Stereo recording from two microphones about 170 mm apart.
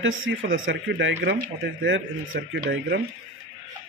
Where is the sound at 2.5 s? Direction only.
70° right (ahead or behind).